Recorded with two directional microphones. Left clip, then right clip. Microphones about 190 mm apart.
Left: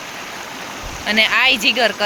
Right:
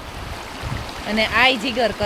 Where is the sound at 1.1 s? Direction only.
15° right (ahead or behind).